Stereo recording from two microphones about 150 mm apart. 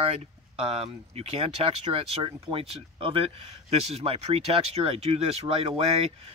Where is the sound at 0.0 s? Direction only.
40° right (ahead or behind).